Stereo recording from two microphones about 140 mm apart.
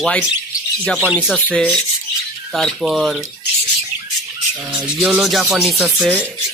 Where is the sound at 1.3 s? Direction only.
10° left (ahead or behind).